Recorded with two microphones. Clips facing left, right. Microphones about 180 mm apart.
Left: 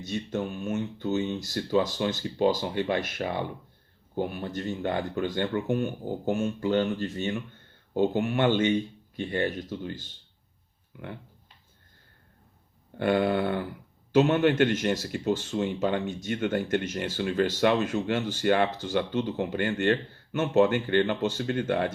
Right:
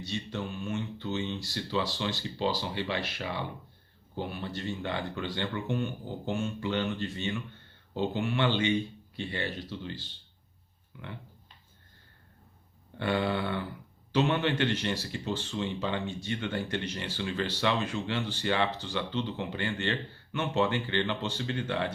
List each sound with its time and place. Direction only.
0.0 s speech: 45° left (ahead or behind)
13.0 s speech: 50° left (ahead or behind)